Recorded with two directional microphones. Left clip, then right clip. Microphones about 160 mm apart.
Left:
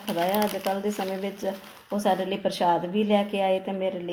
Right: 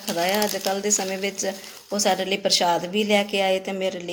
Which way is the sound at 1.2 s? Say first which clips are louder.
Right 4 dB; 10° right (ahead or behind).